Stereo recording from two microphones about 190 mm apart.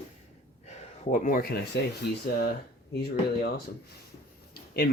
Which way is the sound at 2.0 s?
60° left (ahead or behind).